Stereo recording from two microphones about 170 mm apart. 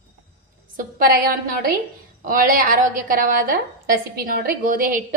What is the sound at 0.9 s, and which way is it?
A woman's voice, 60° right (ahead or behind).